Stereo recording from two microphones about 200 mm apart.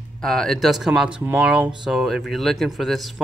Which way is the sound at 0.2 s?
Centre (ahead or behind).